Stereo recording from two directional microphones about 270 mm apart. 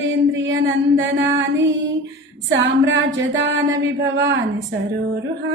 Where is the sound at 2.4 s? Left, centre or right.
Right.